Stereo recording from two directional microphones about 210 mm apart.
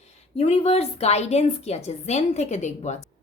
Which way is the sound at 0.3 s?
30° left (ahead or behind).